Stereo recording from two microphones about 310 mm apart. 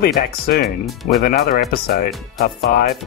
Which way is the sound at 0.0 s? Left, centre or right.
Left.